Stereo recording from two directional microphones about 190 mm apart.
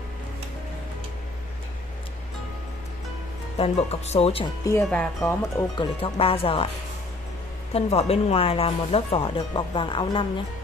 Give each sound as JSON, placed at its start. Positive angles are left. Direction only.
{"t": 3.5, "sound": "speech", "side_deg": 30}
{"t": 4.8, "sound": "speech", "side_deg": 5}
{"t": 5.8, "sound": "speech", "side_deg": 30}
{"t": 7.7, "sound": "speech", "side_deg": 30}